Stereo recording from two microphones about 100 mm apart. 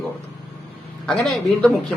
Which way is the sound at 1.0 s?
5° left (ahead or behind).